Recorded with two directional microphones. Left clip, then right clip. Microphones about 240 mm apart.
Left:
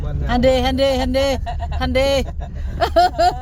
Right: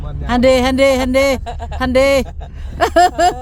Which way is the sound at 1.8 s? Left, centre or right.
Right.